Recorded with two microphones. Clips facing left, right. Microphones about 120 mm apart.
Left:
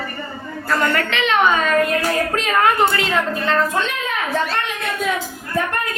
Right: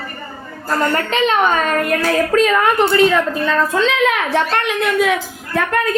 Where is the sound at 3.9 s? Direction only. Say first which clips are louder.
Right 7 dB; 85° right.